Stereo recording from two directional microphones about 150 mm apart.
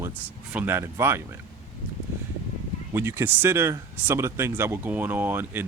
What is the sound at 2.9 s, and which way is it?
Speech, 15° right (ahead or behind).